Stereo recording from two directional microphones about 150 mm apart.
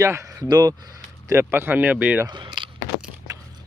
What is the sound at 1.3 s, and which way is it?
Speech, 15° right (ahead or behind).